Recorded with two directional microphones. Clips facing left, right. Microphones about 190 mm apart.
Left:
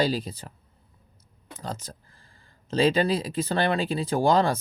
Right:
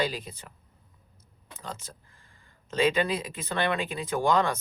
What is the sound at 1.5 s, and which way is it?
Speech, 40° left (ahead or behind).